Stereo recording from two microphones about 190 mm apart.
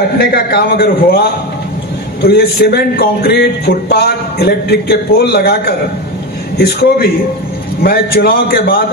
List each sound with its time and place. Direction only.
0.2 s a man's voice: 55° left (ahead or behind)